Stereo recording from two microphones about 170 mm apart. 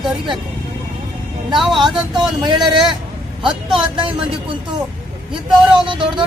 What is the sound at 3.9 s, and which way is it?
Speech, 30° right (ahead or behind).